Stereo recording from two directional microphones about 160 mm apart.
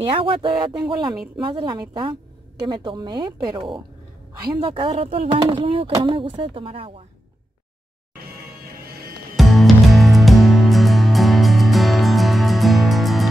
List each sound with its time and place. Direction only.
0.1 s speech: 35° right (ahead or behind)
1.1 s speech: 5° right (ahead or behind)
1.4 s a woman's voice: 30° right (ahead or behind)
9.4 s music: centre (ahead or behind)